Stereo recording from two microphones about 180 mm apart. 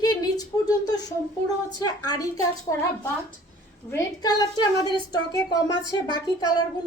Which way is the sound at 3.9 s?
20° left (ahead or behind).